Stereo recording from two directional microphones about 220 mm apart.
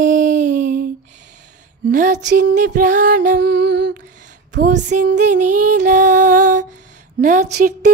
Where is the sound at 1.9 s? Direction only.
35° right (ahead or behind).